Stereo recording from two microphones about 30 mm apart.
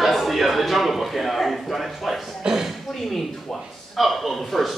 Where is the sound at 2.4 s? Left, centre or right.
Right.